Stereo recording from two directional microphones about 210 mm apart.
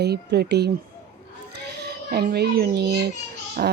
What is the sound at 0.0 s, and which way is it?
A child's voice, 50° right (ahead or behind).